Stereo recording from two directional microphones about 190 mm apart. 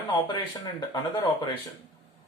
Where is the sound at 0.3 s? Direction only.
25° left (ahead or behind).